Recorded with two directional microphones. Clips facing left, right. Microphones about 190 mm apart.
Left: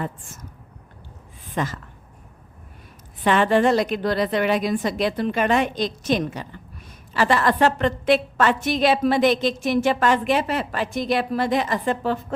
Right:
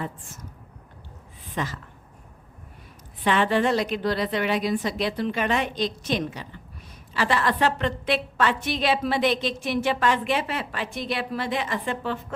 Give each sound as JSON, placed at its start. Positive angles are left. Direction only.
{"t": 1.5, "sound": "a woman's voice", "side_deg": 45}
{"t": 3.2, "sound": "a woman's voice", "side_deg": 45}